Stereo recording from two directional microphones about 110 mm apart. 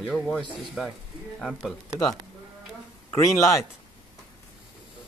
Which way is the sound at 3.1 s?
25° left (ahead or behind).